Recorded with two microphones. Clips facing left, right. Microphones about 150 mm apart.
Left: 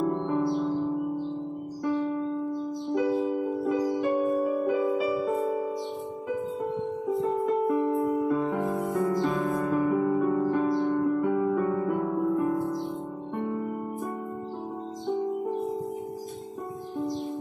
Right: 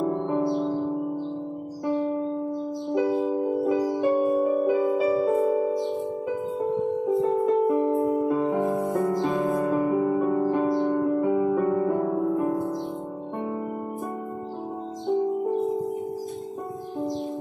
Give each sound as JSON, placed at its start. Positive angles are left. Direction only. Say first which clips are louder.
{"t": 0.0, "sound": "music", "louder": "right 2 dB", "side_deg": -20}
{"t": 1.9, "sound": "music", "louder": "right 2 dB", "side_deg": -25}
{"t": 7.2, "sound": "music", "louder": "right 3 dB", "side_deg": -20}
{"t": 11.6, "sound": "music", "louder": "right 3 dB", "side_deg": -30}